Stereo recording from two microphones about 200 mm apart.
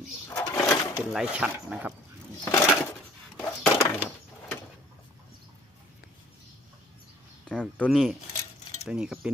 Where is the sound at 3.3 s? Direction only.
10° left (ahead or behind).